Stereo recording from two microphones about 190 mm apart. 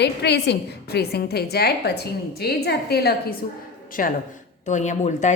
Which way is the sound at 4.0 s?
45° left (ahead or behind).